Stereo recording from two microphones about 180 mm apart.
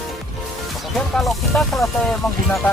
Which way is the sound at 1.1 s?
Centre (ahead or behind).